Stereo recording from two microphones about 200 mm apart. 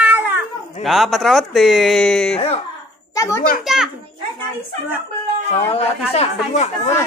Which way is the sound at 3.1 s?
15° left (ahead or behind).